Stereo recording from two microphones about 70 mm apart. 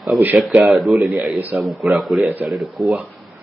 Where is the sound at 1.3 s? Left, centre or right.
Right.